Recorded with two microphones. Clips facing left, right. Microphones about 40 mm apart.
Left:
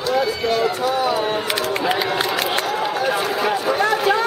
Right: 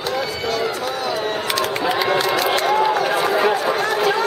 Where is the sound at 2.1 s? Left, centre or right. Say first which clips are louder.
Right 2 dB; left.